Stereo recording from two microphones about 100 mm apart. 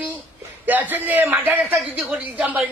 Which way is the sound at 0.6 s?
20° right (ahead or behind).